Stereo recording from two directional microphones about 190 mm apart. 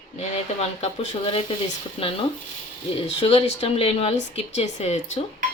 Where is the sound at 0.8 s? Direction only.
35° left (ahead or behind).